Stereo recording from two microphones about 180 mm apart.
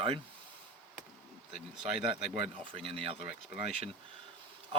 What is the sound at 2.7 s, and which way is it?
Speech, 30° right (ahead or behind).